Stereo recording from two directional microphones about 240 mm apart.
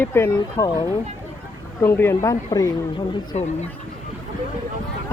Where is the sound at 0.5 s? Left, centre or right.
Left.